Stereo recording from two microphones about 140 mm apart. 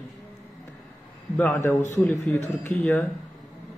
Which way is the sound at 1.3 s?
15° left (ahead or behind).